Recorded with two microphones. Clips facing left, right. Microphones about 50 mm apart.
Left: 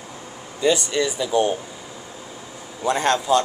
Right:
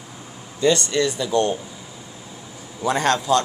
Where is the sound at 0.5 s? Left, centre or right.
Centre.